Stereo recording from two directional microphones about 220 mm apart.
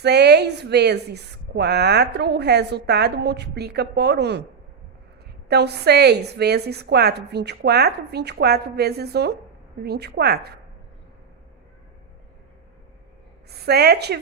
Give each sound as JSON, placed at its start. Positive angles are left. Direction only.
{"t": 0.0, "sound": "a woman's voice", "side_deg": -50}
{"t": 5.5, "sound": "a woman's voice", "side_deg": -50}
{"t": 13.6, "sound": "a woman's voice", "side_deg": -45}